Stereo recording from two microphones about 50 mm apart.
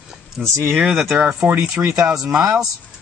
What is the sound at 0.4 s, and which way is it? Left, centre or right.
Speech, centre.